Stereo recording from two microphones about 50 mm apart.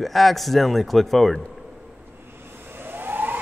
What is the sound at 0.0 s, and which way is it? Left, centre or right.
A man's voice, centre.